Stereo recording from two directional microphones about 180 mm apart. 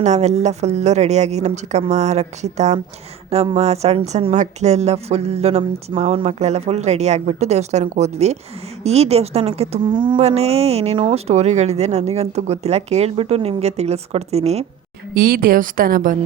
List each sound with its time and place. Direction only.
0.0 s a woman's voice: 40° right (ahead or behind)
15.1 s a woman's voice: 55° right (ahead or behind)